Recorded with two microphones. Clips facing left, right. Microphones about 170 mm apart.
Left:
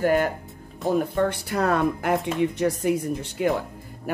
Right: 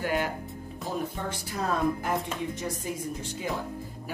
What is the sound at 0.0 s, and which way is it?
Speech, 50° left (ahead or behind).